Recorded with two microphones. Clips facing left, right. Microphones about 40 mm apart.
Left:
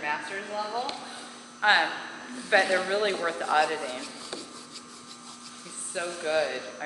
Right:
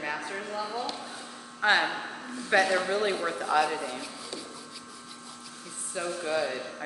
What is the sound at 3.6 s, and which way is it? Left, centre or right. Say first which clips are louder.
Speech: left 1 dB; centre.